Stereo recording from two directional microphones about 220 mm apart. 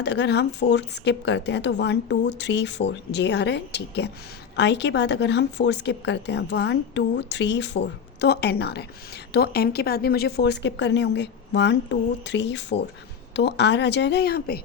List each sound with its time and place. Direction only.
0.0 s speech: 50° left (ahead or behind)